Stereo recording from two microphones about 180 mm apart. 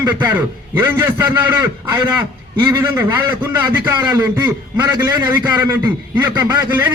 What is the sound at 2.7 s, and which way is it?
A man's voice, 10° right (ahead or behind).